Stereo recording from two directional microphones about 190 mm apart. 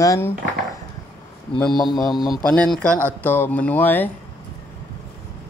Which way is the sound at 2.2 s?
Centre (ahead or behind).